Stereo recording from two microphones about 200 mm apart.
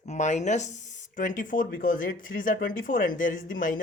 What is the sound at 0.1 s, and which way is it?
Speech, 35° left (ahead or behind).